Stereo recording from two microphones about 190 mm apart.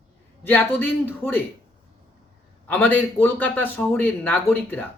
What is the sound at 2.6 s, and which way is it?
A man's voice, 10° left (ahead or behind).